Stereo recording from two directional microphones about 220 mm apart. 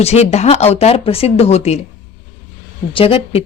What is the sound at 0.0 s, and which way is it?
Speech, 30° left (ahead or behind).